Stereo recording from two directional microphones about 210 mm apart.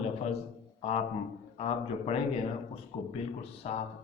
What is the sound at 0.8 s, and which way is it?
A man's voice, 30° left (ahead or behind).